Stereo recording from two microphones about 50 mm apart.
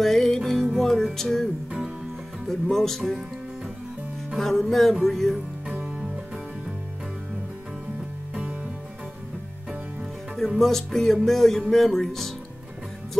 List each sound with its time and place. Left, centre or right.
0.0 s music: centre
4.4 s music: centre
5.7 s music: centre
10.6 s music: centre